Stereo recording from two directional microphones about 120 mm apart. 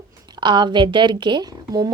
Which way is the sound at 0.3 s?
40° right (ahead or behind).